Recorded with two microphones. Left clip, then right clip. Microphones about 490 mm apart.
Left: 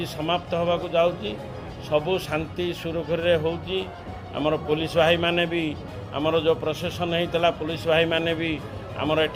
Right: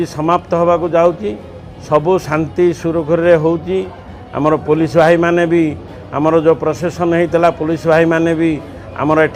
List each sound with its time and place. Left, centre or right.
0.0 s a man's voice: right